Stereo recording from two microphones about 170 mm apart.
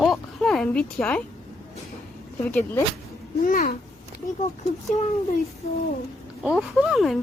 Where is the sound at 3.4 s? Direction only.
55° left (ahead or behind).